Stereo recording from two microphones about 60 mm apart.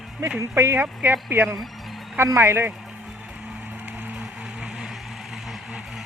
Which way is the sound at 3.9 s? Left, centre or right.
Right.